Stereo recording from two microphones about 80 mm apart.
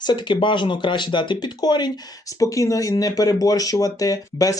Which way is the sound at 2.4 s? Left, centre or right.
Left.